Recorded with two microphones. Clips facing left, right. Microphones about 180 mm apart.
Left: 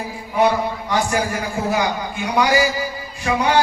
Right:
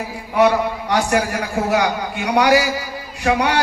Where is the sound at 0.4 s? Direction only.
70° right (ahead or behind).